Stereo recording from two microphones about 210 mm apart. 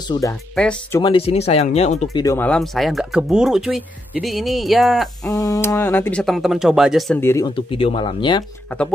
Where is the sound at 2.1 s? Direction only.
15° left (ahead or behind).